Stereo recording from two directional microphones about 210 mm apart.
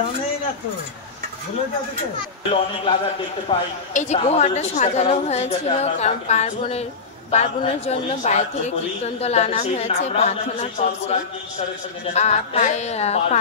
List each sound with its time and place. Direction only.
2.5 s a man's voice: 25° left (ahead or behind)